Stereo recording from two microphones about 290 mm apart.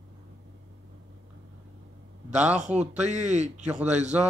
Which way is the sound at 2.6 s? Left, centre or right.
Right.